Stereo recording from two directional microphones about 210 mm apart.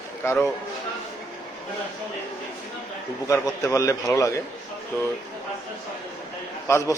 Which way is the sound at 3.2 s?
15° left (ahead or behind).